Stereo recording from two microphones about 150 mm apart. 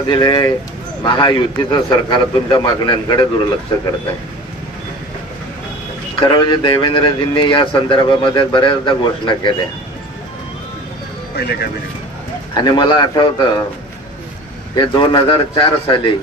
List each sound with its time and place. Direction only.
0.1 s a man's voice: 30° left (ahead or behind)
6.1 s speech: 35° left (ahead or behind)
11.3 s speech: 90° left
12.5 s a man's voice: 30° left (ahead or behind)
14.8 s speech: 30° left (ahead or behind)